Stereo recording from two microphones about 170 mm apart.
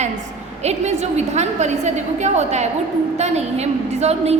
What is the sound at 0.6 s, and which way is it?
A woman's voice, 40° right (ahead or behind).